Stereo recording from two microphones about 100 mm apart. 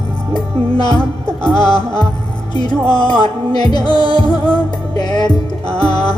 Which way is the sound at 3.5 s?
45° left (ahead or behind).